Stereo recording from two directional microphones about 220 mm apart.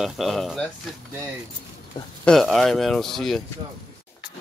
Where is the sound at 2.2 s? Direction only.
Centre (ahead or behind).